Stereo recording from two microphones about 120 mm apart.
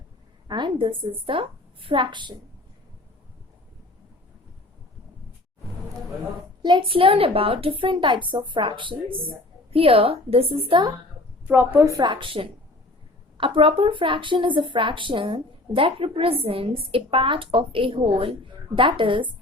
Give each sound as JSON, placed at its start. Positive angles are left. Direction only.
{"t": 0.4, "sound": "speech", "side_deg": -40}
{"t": 6.6, "sound": "speech", "side_deg": -40}
{"t": 11.4, "sound": "a woman's voice", "side_deg": -15}
{"t": 11.9, "sound": "speech", "side_deg": -40}